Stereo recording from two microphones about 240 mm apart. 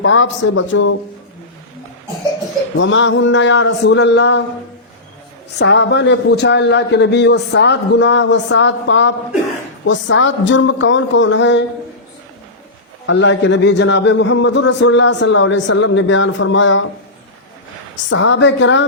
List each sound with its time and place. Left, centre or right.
0.0 s a man's voice: left
2.7 s a man's voice: left
5.5 s a man's voice: left
13.1 s a man's voice: left
18.1 s a man's voice: left